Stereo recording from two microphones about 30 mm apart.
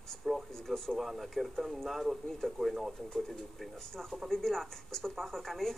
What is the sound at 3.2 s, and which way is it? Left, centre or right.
Speech, centre.